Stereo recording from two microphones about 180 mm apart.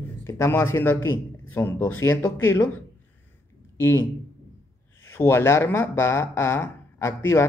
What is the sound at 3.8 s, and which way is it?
Speech, 15° left (ahead or behind).